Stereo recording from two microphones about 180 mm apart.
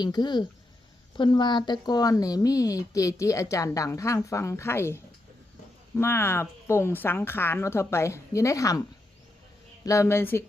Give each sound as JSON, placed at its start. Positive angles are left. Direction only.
{"t": 0.0, "sound": "speech", "side_deg": 25}
{"t": 6.0, "sound": "speech", "side_deg": 15}
{"t": 9.8, "sound": "speech", "side_deg": 15}